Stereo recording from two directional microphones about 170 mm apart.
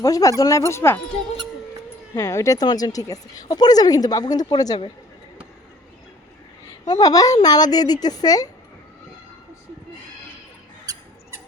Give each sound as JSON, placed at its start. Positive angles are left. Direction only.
{"t": 0.0, "sound": "speech", "side_deg": 20}
{"t": 2.1, "sound": "speech", "side_deg": 20}
{"t": 6.8, "sound": "speech", "side_deg": 20}